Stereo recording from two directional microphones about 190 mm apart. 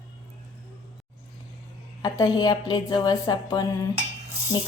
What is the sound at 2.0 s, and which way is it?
Speech, 20° left (ahead or behind).